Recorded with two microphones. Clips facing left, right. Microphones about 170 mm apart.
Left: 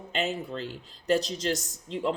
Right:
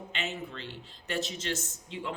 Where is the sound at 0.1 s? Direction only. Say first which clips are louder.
Left 8 dB; 40° left (ahead or behind).